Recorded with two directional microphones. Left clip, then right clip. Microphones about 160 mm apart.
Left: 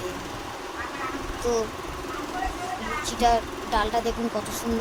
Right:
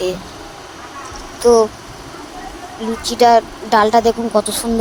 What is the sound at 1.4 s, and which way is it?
Speech, 50° right (ahead or behind).